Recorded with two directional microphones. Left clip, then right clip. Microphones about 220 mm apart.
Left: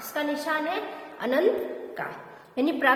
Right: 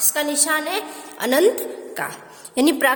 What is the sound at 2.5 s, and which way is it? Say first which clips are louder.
Speech: right 5 dB; 50° right (ahead or behind).